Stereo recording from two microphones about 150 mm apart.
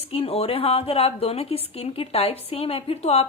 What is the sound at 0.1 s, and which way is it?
A woman's voice, 40° left (ahead or behind).